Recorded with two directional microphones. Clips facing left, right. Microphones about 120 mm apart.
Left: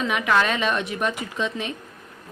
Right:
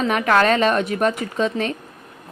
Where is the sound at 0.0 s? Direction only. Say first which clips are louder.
Right 4 dB; 45° right (ahead or behind).